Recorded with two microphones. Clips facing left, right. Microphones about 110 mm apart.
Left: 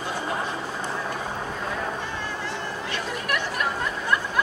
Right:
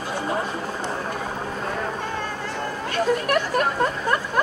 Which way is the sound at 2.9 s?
45° right (ahead or behind).